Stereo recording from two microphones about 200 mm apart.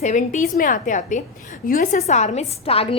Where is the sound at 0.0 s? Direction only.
40° left (ahead or behind).